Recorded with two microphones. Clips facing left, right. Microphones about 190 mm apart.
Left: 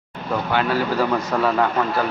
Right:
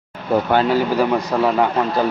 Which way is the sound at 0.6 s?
20° right (ahead or behind).